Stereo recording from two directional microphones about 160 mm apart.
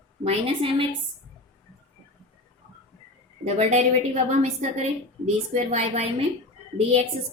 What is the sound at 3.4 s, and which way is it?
A woman's voice, 45° right (ahead or behind).